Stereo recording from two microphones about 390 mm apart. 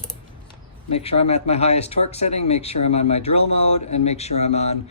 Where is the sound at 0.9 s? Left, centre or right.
Centre.